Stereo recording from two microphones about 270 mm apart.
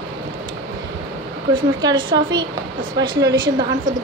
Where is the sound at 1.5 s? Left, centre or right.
Centre.